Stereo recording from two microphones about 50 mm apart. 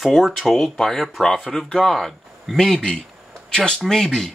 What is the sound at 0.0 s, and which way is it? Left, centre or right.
Speech, centre.